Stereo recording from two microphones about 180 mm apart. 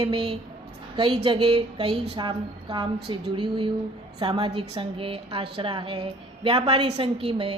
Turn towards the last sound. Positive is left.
turn(degrees=-35)  # may be behind; listen again after turning